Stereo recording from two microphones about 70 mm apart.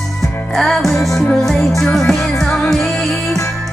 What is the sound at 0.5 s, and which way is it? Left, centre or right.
Music, centre.